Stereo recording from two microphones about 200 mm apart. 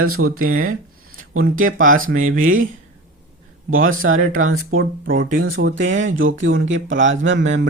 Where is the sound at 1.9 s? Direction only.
90° right.